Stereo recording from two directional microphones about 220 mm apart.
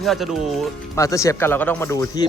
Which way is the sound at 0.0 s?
Centre (ahead or behind).